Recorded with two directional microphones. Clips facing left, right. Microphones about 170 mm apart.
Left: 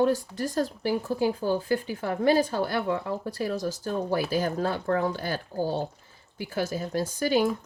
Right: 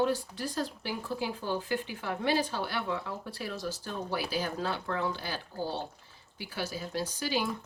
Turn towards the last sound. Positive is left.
turn(degrees=50)  # may be behind; listen again after turning